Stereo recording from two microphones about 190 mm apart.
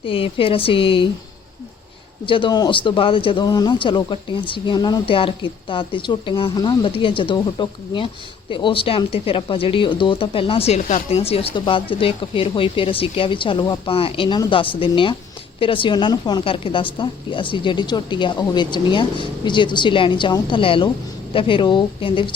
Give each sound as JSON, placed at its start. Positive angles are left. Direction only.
{"t": 0.0, "sound": "speech", "side_deg": 30}
{"t": 2.2, "sound": "speech", "side_deg": 25}